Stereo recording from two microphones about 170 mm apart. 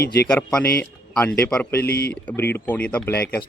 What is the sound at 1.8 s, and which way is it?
Speech, 70° left (ahead or behind).